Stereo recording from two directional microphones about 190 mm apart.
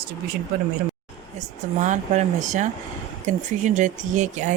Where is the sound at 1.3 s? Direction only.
40° right (ahead or behind).